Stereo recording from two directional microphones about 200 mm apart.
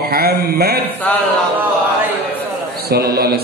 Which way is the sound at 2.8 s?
50° right (ahead or behind).